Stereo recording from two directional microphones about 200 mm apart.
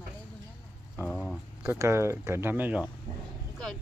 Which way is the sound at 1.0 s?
5° left (ahead or behind).